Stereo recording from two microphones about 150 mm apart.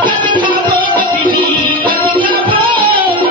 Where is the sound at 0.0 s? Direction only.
30° right (ahead or behind).